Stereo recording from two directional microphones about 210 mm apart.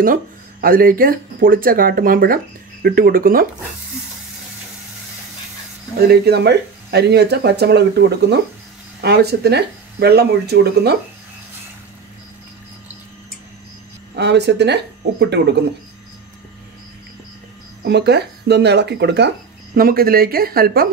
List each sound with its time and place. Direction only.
0.0 s speech: 40° right (ahead or behind)
5.9 s speech: 50° right (ahead or behind)
14.1 s speech: 55° right (ahead or behind)
17.8 s speech: 55° right (ahead or behind)